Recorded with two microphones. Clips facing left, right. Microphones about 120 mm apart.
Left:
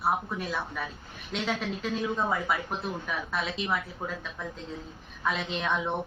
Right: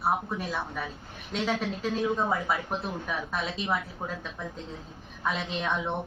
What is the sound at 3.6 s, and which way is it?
Speech, 30° right (ahead or behind).